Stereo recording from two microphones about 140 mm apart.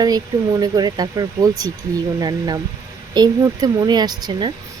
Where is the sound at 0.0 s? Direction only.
25° right (ahead or behind).